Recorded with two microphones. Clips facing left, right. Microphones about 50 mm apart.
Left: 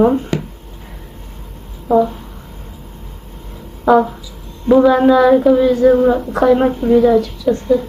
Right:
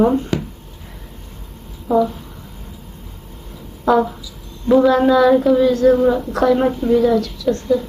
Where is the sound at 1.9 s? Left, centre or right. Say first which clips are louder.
Left 3 dB; centre.